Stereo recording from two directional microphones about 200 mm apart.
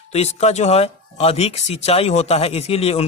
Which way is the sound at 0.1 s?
30° left (ahead or behind).